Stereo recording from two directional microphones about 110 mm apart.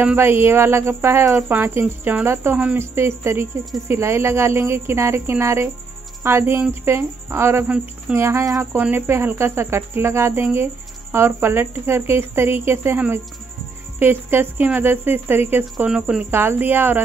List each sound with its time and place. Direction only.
0.0 s speech: 20° right (ahead or behind)
15.9 s speech: 10° right (ahead or behind)
16.3 s speech: 20° right (ahead or behind)